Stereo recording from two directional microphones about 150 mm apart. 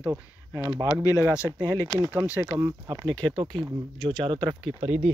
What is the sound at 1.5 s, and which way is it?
Speech, 25° right (ahead or behind).